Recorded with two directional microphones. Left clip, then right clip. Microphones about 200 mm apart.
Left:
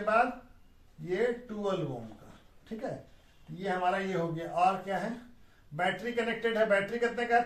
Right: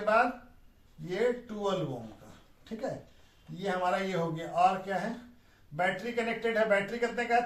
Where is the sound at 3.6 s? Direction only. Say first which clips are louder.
Even; centre (ahead or behind).